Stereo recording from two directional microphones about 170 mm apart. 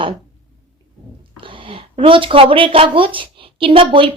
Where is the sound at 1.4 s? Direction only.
30° right (ahead or behind).